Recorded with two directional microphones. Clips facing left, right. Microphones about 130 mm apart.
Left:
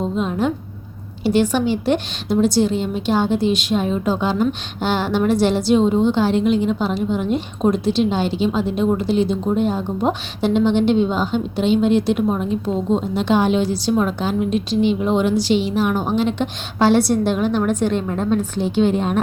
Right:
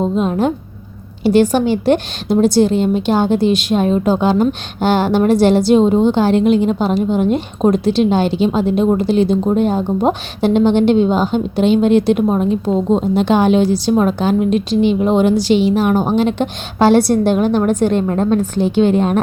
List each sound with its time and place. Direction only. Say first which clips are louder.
0.2 s a woman's voice: right 4 dB; 50° right (ahead or behind)
12.3 s a woman's voice: right 5 dB; 45° right (ahead or behind)
18.6 s a woman's voice: right 5 dB; 75° right (ahead or behind)